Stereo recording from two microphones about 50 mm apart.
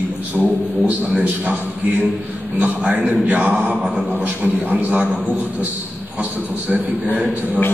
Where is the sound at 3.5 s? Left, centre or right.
Centre.